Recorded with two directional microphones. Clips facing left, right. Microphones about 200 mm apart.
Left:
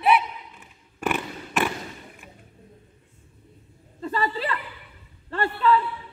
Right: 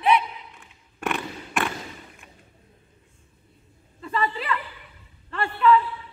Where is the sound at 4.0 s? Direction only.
35° left (ahead or behind).